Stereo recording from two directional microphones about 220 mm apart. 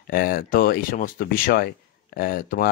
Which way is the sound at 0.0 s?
40° left (ahead or behind).